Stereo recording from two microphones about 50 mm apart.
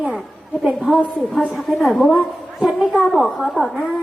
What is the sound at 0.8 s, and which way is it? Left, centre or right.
A woman's voice, centre.